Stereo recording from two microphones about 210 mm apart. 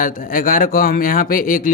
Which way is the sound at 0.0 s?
40° left (ahead or behind).